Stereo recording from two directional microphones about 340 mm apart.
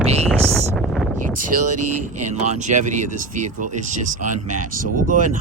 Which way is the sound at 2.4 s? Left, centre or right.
Right.